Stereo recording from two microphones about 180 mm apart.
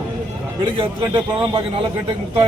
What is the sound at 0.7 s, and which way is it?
A man's voice, 30° right (ahead or behind).